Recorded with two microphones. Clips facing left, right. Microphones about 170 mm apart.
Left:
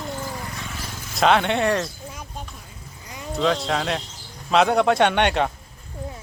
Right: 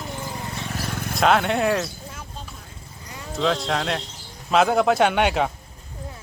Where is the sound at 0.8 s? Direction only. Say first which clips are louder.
Right 7 dB; 60° right (ahead or behind).